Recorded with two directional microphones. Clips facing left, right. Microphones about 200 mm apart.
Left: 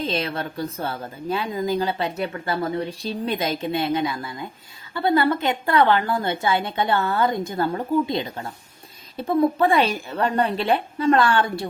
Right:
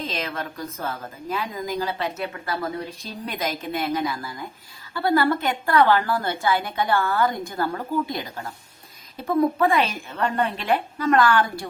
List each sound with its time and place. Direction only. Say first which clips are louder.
0.0 s a woman's voice: left 4 dB; 35° left (ahead or behind)